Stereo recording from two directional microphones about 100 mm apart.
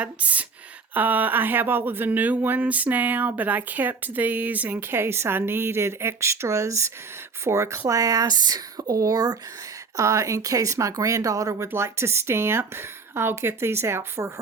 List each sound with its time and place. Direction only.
0.0 s speech: 15° right (ahead or behind)